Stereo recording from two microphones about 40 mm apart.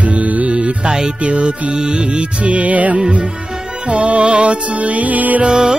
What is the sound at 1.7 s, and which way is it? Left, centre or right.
Music, right.